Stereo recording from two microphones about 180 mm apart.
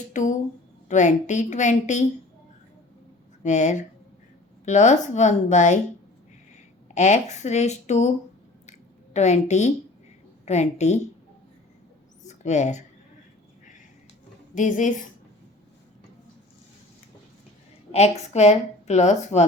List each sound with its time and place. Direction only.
0.1 s a woman's voice: 45° left (ahead or behind)
3.4 s a woman's voice: 40° left (ahead or behind)
6.9 s a woman's voice: 40° left (ahead or behind)
9.1 s a woman's voice: 40° left (ahead or behind)
12.3 s speech: 40° left (ahead or behind)
14.5 s a woman's voice: 45° left (ahead or behind)
17.9 s a woman's voice: 35° left (ahead or behind)